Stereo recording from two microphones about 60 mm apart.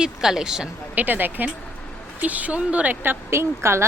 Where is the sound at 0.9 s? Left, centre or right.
Right.